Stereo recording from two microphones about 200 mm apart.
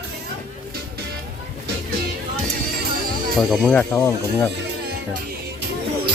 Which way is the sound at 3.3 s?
Centre (ahead or behind).